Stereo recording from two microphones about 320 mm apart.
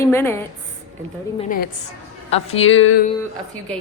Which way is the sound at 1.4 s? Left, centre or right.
Left.